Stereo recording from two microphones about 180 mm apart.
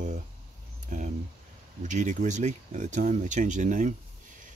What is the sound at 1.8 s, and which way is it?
Speech, 45° right (ahead or behind).